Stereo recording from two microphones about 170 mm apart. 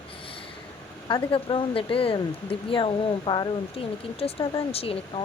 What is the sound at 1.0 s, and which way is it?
Speech, 30° left (ahead or behind).